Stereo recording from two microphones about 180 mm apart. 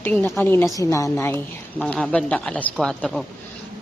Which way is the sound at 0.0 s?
10° left (ahead or behind).